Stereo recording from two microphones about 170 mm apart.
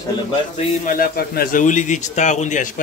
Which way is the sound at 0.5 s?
55° left (ahead or behind).